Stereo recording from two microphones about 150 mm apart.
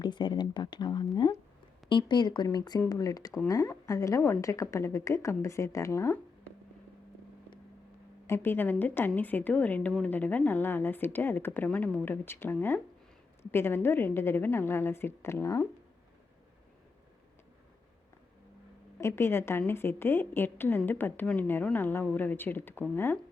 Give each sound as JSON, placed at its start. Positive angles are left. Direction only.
{"t": 0.0, "sound": "a woman's voice", "side_deg": 30}
{"t": 8.3, "sound": "a woman's voice", "side_deg": 15}
{"t": 18.9, "sound": "a woman's voice", "side_deg": 15}